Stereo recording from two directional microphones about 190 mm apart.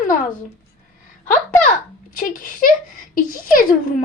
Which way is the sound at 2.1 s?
45° left (ahead or behind).